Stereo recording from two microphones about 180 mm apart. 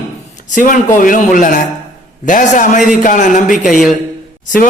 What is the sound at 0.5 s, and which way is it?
A man's voice, 45° left (ahead or behind).